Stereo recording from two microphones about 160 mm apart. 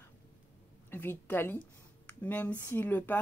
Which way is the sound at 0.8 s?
15° left (ahead or behind).